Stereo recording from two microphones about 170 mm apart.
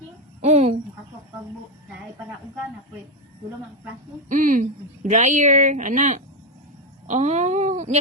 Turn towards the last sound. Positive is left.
turn(degrees=-45)  # may be behind; listen again after turning